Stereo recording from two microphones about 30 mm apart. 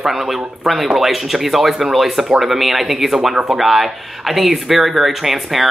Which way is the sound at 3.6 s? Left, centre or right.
Centre.